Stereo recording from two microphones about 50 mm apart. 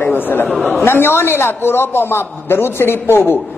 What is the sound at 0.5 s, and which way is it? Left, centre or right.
Speech, centre.